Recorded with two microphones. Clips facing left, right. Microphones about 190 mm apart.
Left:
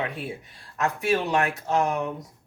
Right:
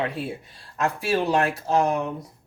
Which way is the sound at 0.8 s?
30° right (ahead or behind).